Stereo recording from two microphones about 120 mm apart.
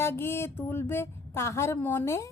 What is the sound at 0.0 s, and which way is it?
A woman's voice, 20° left (ahead or behind).